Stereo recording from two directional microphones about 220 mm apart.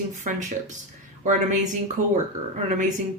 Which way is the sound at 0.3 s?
35° right (ahead or behind).